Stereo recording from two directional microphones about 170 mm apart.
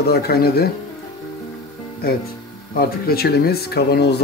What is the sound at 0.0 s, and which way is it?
Speech, 65° left (ahead or behind).